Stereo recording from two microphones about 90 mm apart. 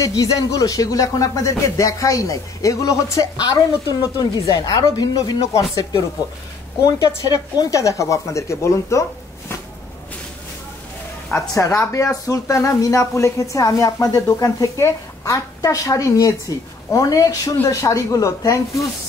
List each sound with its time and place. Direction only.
0.0 s speech: 40° left (ahead or behind)
5.5 s speech: 35° left (ahead or behind)
7.2 s speech: 45° left (ahead or behind)
11.3 s speech: 35° left (ahead or behind)